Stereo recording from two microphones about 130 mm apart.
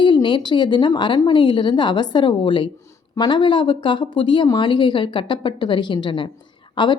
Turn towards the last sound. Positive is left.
turn(degrees=40)  # may be behind; listen again after turning